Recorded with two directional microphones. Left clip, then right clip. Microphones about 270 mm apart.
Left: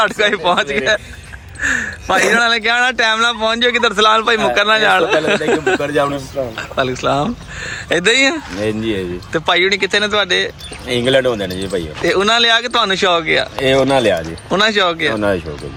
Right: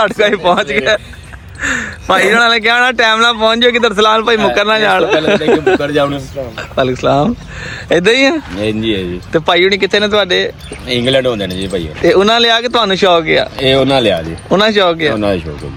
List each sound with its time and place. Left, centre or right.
0.0 s speech: centre
11.4 s speech: left
11.7 s speech: centre